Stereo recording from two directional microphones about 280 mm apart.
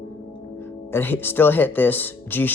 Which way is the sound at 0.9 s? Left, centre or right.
Centre.